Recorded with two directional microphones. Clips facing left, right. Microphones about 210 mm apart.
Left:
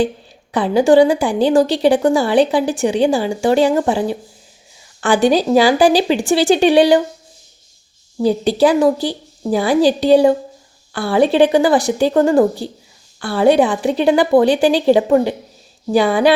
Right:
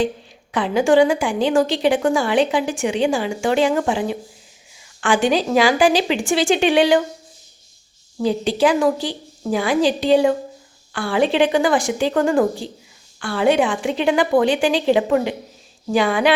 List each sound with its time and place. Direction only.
0.5 s a woman's voice: 35° left (ahead or behind)
8.2 s a woman's voice: 35° left (ahead or behind)